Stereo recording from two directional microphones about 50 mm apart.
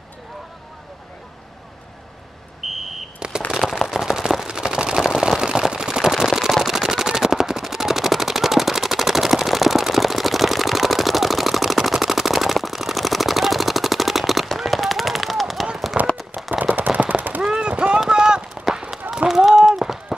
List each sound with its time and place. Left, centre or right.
2.6 s smoke detector: centre
3.2 s firecracker: centre
3.5 s a sound: centre
14.6 s machine gun: centre
16.0 s a sound: right
16.7 s gunshot: right
17.4 s machine gun: centre
18.0 s a sound: centre
18.7 s run: centre